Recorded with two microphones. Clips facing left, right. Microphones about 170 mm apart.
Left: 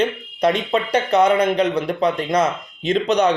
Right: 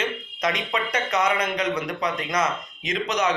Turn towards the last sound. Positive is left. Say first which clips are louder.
# left 7 dB
turn(degrees=30)  # may be behind; listen again after turning